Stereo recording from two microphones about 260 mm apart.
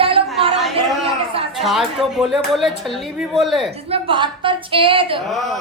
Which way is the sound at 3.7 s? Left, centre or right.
Right.